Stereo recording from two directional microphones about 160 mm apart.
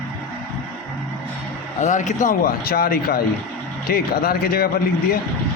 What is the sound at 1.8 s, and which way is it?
A man's voice, 50° left (ahead or behind).